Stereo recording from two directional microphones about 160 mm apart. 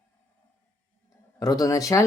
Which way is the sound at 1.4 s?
20° left (ahead or behind).